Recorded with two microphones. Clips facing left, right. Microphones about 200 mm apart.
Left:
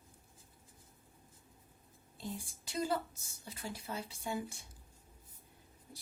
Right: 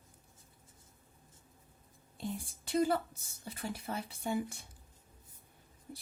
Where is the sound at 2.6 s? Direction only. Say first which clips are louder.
Right 5 dB; 55° right (ahead or behind).